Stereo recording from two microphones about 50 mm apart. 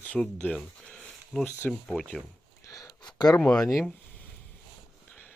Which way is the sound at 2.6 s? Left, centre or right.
Left.